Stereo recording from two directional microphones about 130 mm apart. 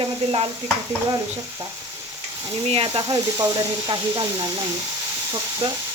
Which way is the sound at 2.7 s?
45° right (ahead or behind).